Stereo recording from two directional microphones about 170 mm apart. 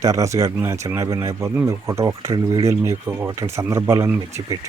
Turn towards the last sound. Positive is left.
turn(degrees=-15)  # may be behind; listen again after turning